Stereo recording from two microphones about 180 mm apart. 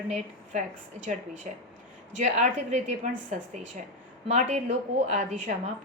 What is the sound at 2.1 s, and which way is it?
Speech, 45° right (ahead or behind).